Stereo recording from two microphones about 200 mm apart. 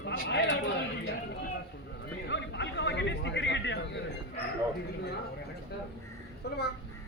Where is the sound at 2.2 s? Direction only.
60° left (ahead or behind).